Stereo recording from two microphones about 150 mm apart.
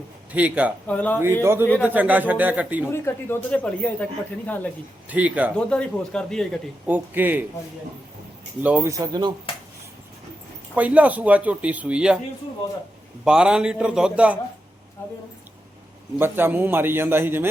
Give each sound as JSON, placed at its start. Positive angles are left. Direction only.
{"t": 0.3, "sound": "speech", "side_deg": -10}
{"t": 0.9, "sound": "speech", "side_deg": 10}
{"t": 1.2, "sound": "speech", "side_deg": -15}
{"t": 1.6, "sound": "speech", "side_deg": 10}
{"t": 1.9, "sound": "speech", "side_deg": -10}
{"t": 2.9, "sound": "speech", "side_deg": 10}
{"t": 5.0, "sound": "speech", "side_deg": -10}
{"t": 5.6, "sound": "a man's voice", "side_deg": 5}
{"t": 6.8, "sound": "speech", "side_deg": -10}
{"t": 8.6, "sound": "speech", "side_deg": -10}
{"t": 8.9, "sound": "speech", "side_deg": -25}
{"t": 10.8, "sound": "speech", "side_deg": -10}
{"t": 13.2, "sound": "a man's voice", "side_deg": -5}
{"t": 16.1, "sound": "speech", "side_deg": -15}